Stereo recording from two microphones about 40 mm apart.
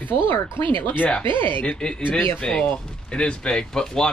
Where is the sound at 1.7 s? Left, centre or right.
Left.